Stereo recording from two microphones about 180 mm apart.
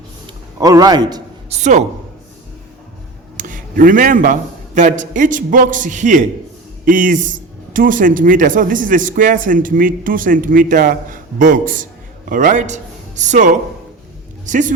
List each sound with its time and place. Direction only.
0.6 s a man's voice: 20° right (ahead or behind)
1.5 s a woman's voice: 40° right (ahead or behind)
3.3 s a man's voice: 45° right (ahead or behind)